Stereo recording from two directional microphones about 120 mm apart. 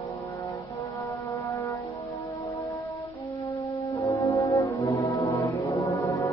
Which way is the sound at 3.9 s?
25° left (ahead or behind).